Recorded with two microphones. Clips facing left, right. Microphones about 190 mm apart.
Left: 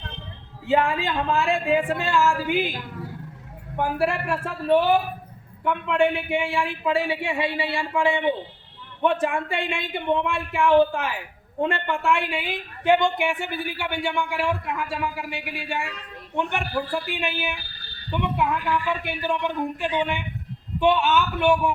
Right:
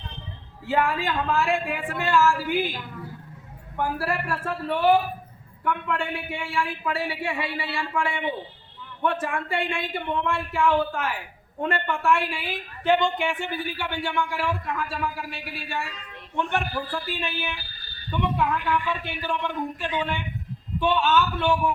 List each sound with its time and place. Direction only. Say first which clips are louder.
0.6 s speech: left 3 dB; 25° left (ahead or behind)
3.8 s speech: left 3 dB; 20° left (ahead or behind)
9.0 s speech: left 4 dB; 20° left (ahead or behind)
9.6 s speech: left 4 dB; 10° left (ahead or behind)